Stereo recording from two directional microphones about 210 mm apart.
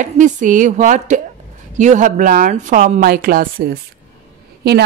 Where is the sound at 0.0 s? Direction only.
35° right (ahead or behind).